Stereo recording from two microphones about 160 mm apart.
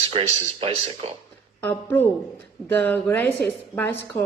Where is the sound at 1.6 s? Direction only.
15° left (ahead or behind).